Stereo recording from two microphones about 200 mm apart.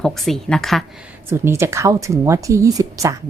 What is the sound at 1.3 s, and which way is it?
A woman's voice, 10° right (ahead or behind).